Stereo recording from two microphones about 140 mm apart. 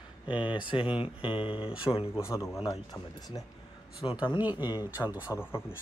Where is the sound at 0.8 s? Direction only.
10° right (ahead or behind).